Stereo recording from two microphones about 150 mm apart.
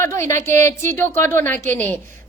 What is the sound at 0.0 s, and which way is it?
A woman's voice, 20° left (ahead or behind).